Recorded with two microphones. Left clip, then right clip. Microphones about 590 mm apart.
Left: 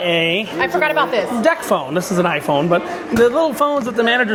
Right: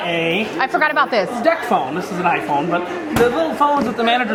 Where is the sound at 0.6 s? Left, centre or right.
Right.